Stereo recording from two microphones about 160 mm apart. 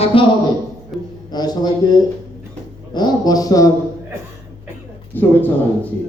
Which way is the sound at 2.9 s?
25° left (ahead or behind).